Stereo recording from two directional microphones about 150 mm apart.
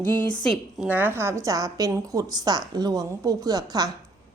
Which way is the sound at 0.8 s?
10° right (ahead or behind).